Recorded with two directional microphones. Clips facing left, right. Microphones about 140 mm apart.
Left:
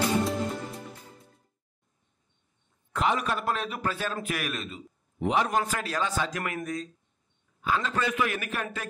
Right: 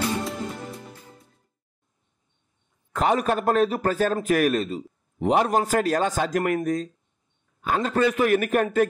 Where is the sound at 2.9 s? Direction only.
40° right (ahead or behind).